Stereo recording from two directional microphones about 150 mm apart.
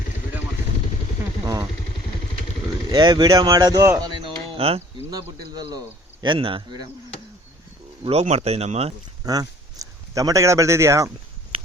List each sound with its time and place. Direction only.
2.9 s speech: 25° right (ahead or behind)
4.5 s speech: 40° right (ahead or behind)
6.2 s speech: 35° right (ahead or behind)
8.0 s speech: 45° right (ahead or behind)
9.2 s speech: 25° right (ahead or behind)